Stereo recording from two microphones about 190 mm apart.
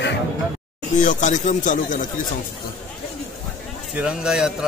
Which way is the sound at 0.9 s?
40° left (ahead or behind).